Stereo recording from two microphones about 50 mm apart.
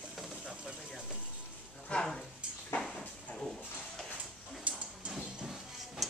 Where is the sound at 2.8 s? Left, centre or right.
Centre.